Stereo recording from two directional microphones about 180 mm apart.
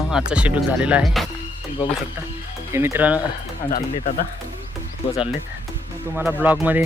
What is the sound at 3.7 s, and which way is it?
Speech, 45° left (ahead or behind).